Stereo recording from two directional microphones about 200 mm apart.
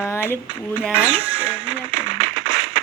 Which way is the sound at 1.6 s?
75° right (ahead or behind).